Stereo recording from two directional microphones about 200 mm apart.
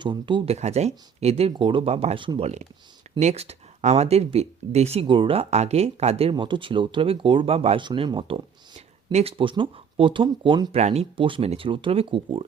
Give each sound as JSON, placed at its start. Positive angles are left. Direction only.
{"t": 0.0, "sound": "speech", "side_deg": -25}